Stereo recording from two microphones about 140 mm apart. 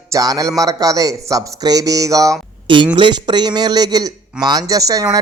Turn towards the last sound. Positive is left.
turn(degrees=-25)  # may be behind; listen again after turning